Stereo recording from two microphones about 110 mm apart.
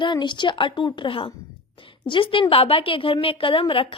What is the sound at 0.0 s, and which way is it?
A woman's voice, 45° left (ahead or behind).